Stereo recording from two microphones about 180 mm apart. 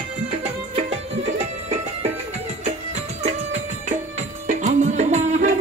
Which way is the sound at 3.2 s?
40° right (ahead or behind).